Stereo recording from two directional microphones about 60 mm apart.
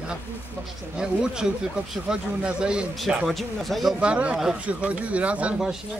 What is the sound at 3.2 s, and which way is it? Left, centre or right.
Speech, centre.